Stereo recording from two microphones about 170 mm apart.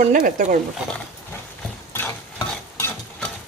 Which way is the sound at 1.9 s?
15° left (ahead or behind).